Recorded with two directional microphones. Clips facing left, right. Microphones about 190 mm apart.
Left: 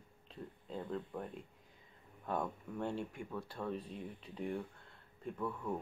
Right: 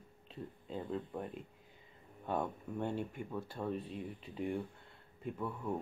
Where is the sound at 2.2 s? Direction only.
Centre (ahead or behind).